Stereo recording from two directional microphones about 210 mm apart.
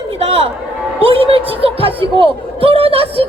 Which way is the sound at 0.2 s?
25° right (ahead or behind).